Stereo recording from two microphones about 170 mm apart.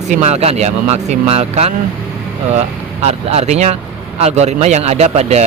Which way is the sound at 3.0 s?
40° right (ahead or behind).